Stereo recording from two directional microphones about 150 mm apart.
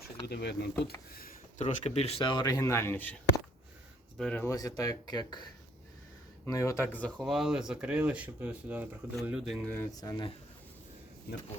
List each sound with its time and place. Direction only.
0.3 s speech: 90° left
1.1 s speech: 75° left (ahead or behind); by 3.2 s 10° left (ahead or behind)
4.2 s speech: 5° left (ahead or behind)
4.4 s speech: 25° left (ahead or behind); by 9.6 s centre (ahead or behind)
9.6 s speech: 15° left (ahead or behind)
11.3 s speech: 90° left